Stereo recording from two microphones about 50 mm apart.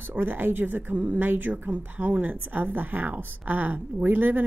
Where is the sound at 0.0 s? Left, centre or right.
Right.